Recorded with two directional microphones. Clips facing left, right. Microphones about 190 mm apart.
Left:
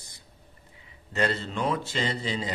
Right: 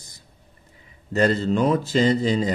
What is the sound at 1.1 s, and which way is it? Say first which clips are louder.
A man's voice: right 8 dB; 40° right (ahead or behind).